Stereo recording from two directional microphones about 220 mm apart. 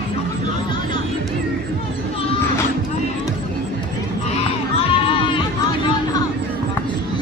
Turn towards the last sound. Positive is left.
turn(degrees=25)  # may be behind; listen again after turning